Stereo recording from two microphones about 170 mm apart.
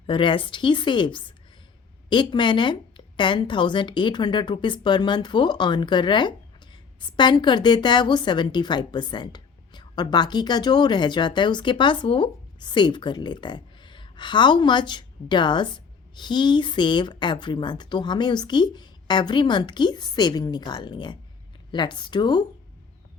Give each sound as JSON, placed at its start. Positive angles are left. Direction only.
{"t": 0.1, "sound": "a woman's voice", "side_deg": 30}